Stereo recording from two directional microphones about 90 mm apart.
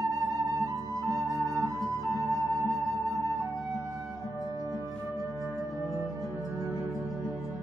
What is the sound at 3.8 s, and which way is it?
Flute, 40° right (ahead or behind).